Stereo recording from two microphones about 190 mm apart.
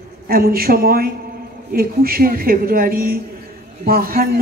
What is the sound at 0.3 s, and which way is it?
Speech, 50° right (ahead or behind).